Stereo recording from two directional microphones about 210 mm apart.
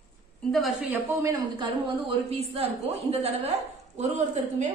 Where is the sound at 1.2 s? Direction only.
25° right (ahead or behind).